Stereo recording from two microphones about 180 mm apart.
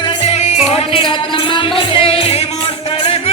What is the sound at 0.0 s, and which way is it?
Music, 30° left (ahead or behind).